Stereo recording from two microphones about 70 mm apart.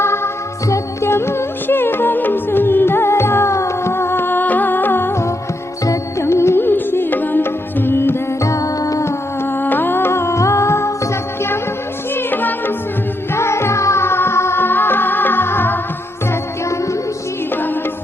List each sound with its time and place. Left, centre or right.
0.0 s music: left
5.8 s music: left
6.2 s music: left
9.6 s music: left
12.1 s music: left
13.3 s music: left